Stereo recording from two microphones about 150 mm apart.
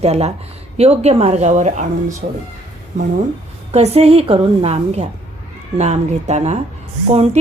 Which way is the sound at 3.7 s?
45° right (ahead or behind).